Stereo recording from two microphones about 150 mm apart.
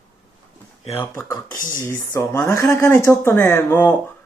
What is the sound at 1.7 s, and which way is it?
A man's voice, 20° left (ahead or behind).